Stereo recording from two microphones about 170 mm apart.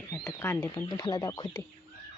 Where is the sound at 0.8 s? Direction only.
25° left (ahead or behind).